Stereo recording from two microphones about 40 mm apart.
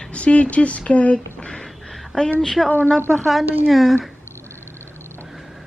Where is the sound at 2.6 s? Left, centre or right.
Centre.